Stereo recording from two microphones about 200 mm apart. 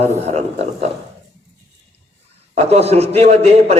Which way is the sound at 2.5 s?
30° right (ahead or behind).